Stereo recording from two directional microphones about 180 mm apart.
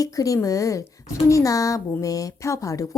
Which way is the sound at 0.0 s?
20° left (ahead or behind).